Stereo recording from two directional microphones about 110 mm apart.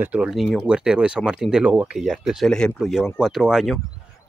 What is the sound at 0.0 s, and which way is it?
Speech, 10° right (ahead or behind).